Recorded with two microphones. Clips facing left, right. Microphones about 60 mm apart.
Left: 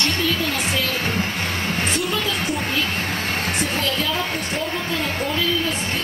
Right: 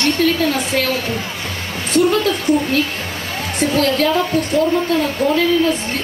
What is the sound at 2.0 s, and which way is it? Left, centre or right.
A woman's voice, right.